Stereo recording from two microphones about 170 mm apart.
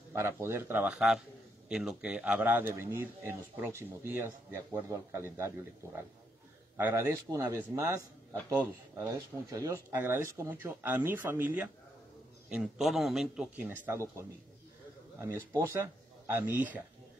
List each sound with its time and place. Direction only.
0.1 s speech: 15° right (ahead or behind)
6.8 s a man's voice: 15° right (ahead or behind)